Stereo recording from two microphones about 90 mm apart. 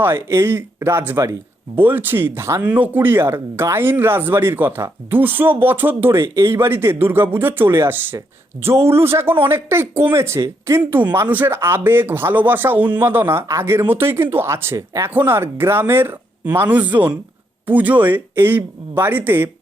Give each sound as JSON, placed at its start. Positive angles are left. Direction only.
{"t": 0.0, "sound": "speech", "side_deg": -25}